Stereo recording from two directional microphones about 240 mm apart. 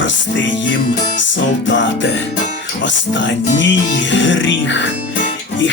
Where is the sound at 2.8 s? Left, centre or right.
Left.